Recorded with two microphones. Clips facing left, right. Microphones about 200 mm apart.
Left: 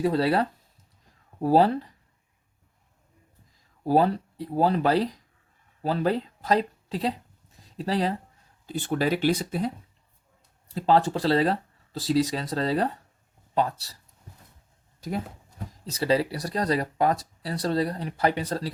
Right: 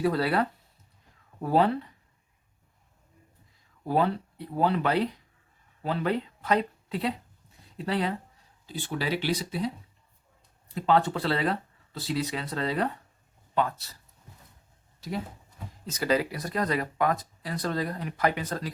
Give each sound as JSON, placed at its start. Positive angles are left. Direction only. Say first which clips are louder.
{"t": 0.0, "sound": "speech", "louder": "left 2 dB", "side_deg": 25}
{"t": 3.8, "sound": "speech", "louder": "left 4 dB", "side_deg": 35}
{"t": 8.6, "sound": "speech", "louder": "left 6 dB", "side_deg": 50}
{"t": 10.8, "sound": "speech", "louder": "left 2 dB", "side_deg": 30}
{"t": 15.9, "sound": "speech", "louder": "left 2 dB", "side_deg": 30}